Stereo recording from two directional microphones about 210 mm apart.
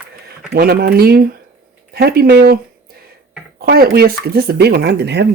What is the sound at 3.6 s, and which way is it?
Speech, 45° right (ahead or behind).